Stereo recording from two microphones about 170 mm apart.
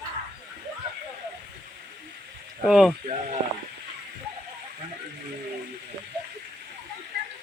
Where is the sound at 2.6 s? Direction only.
Centre (ahead or behind).